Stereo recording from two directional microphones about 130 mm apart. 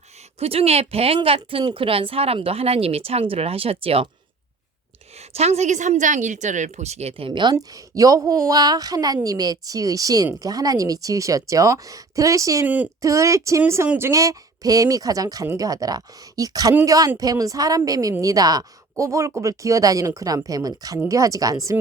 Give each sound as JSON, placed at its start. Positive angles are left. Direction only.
{"t": 0.3, "sound": "a woman's voice", "side_deg": -50}
{"t": 5.3, "sound": "speech", "side_deg": -55}
{"t": 7.5, "sound": "speech", "side_deg": -25}
{"t": 12.6, "sound": "speech", "side_deg": -10}
{"t": 13.0, "sound": "speech", "side_deg": -25}